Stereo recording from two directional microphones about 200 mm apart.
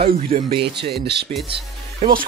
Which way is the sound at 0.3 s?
45° right (ahead or behind).